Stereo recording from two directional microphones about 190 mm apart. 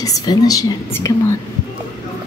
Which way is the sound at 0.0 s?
20° left (ahead or behind).